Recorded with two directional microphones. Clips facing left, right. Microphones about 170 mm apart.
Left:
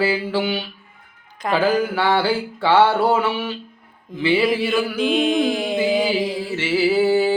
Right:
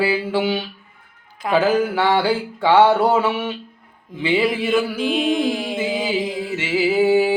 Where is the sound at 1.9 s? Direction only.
20° right (ahead or behind).